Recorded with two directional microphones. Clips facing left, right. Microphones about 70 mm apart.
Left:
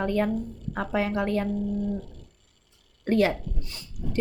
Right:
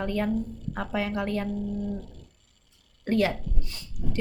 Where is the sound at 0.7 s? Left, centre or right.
Left.